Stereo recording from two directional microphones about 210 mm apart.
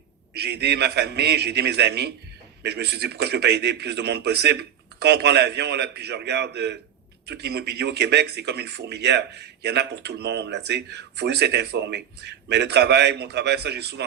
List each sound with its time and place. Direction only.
0.3 s speech: 50° right (ahead or behind)